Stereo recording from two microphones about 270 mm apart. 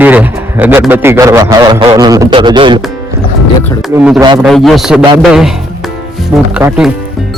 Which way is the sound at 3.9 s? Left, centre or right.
Centre.